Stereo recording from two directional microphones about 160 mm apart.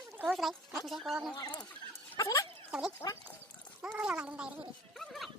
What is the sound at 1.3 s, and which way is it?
Speech, 25° left (ahead or behind).